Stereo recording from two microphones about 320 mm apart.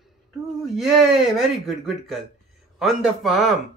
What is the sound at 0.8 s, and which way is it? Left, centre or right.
Speech, centre.